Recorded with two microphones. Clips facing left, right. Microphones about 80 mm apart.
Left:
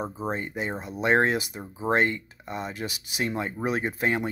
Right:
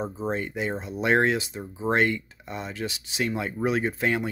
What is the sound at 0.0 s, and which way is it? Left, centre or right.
Speech, centre.